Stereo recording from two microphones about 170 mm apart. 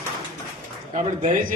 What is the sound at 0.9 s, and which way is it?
Speech, 45° right (ahead or behind).